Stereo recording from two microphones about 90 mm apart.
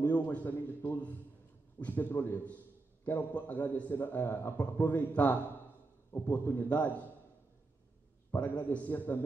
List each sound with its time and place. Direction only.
0.0 s a man's voice: 20° left (ahead or behind)
8.6 s a man's voice: 20° left (ahead or behind)